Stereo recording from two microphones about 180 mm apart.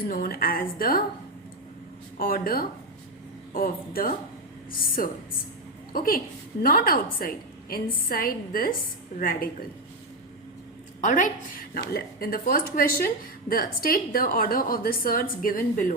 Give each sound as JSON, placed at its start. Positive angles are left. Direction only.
{"t": 0.0, "sound": "a woman's voice", "side_deg": 55}
{"t": 2.1, "sound": "a woman's voice", "side_deg": 55}
{"t": 5.9, "sound": "a woman's voice", "side_deg": 50}
{"t": 11.0, "sound": "a woman's voice", "side_deg": 45}